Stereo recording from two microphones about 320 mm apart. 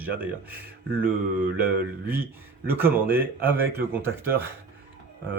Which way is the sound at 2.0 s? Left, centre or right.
Right.